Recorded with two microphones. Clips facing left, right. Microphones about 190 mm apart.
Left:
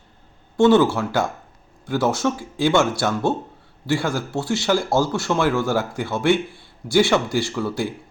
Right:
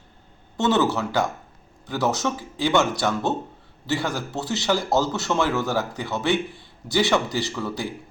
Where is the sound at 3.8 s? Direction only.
20° right (ahead or behind).